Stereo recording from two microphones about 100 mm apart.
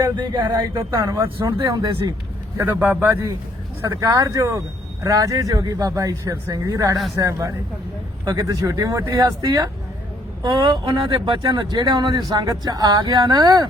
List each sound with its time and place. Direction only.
0.2 s speech: 50° right (ahead or behind)
0.7 s speech: 35° right (ahead or behind)
1.7 s speech: 45° right (ahead or behind)
3.1 s a man's voice: 30° right (ahead or behind)
10.4 s speech: 50° right (ahead or behind)